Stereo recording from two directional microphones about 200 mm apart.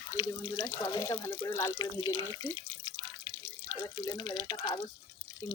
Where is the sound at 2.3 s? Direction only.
20° left (ahead or behind).